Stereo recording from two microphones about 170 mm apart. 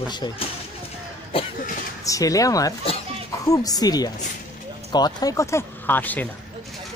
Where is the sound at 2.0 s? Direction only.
20° left (ahead or behind).